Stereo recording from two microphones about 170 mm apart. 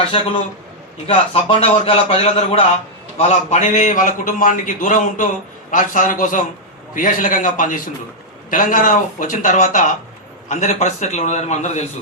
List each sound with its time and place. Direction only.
1.0 s a man's voice: 35° left (ahead or behind)